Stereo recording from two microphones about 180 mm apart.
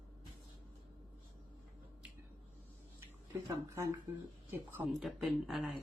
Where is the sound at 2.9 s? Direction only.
15° right (ahead or behind).